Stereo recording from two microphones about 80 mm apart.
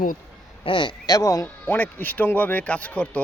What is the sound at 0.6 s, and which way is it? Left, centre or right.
Speech, left.